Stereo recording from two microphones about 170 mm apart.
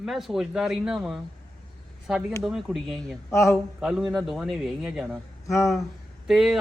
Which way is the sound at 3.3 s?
15° left (ahead or behind).